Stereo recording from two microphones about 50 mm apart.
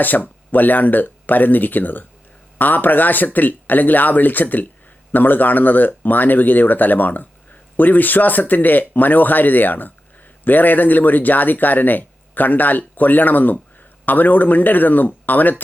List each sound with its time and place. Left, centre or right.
0.5 s a man's voice: left